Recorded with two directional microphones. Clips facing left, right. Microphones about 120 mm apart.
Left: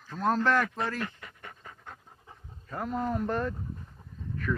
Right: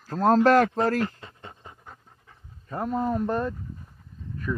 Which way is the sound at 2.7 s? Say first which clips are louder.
Right 5 dB; 30° right (ahead or behind).